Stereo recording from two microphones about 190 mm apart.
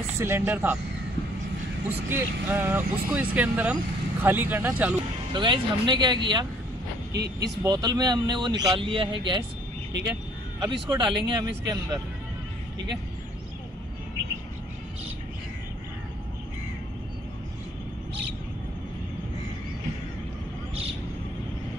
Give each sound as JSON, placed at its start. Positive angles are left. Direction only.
{"t": 0.2, "sound": "speech", "side_deg": -10}
{"t": 2.0, "sound": "speech", "side_deg": -10}
{"t": 5.3, "sound": "a man's voice", "side_deg": -25}
{"t": 7.1, "sound": "speech", "side_deg": -60}
{"t": 7.6, "sound": "a man's voice", "side_deg": -20}
{"t": 10.6, "sound": "a man's voice", "side_deg": -25}
{"t": 12.7, "sound": "speech", "side_deg": -65}